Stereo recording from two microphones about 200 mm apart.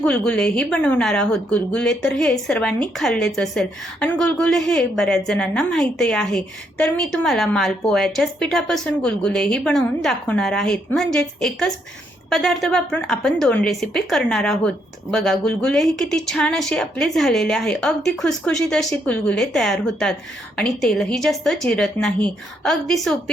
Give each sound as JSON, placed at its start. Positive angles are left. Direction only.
{"t": 0.0, "sound": "a woman's voice", "side_deg": 5}